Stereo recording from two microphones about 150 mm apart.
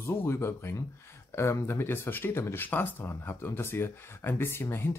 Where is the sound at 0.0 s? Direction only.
15° left (ahead or behind).